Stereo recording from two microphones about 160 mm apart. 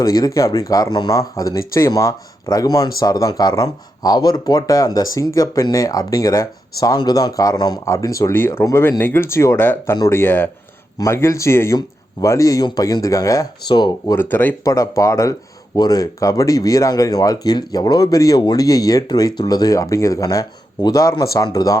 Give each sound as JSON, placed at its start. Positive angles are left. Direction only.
{"t": 0.0, "sound": "speech", "side_deg": 20}
{"t": 14.2, "sound": "speech", "side_deg": 10}